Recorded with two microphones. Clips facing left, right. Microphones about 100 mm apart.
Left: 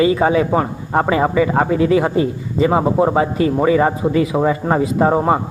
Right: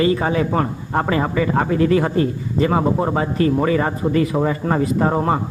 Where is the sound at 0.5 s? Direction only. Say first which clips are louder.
Left 3 dB; 20° left (ahead or behind).